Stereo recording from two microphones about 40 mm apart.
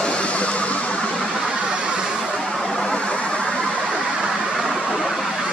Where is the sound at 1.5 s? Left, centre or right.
Centre.